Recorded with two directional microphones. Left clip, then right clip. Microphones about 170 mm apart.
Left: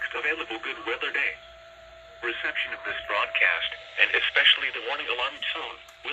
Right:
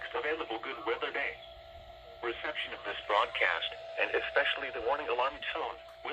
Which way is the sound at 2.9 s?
15° right (ahead or behind).